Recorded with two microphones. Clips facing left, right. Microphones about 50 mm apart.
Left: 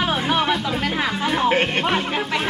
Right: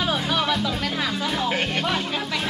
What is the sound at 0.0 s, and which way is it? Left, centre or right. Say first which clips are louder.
Music: left 3 dB; left.